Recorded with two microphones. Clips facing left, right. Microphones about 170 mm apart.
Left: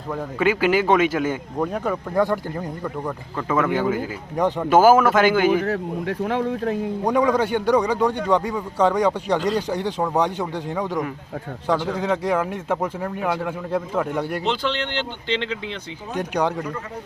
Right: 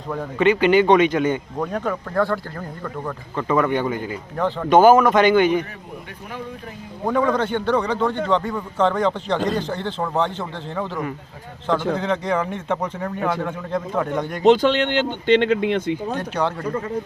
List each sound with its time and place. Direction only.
0.1 s speech: 5° left (ahead or behind)
3.3 s speech: 5° left (ahead or behind)
4.4 s speech: 15° left (ahead or behind)
5.6 s speech: 90° left
7.0 s a man's voice: 15° left (ahead or behind)
14.4 s speech: 50° right (ahead or behind)
16.1 s a man's voice: 15° left (ahead or behind)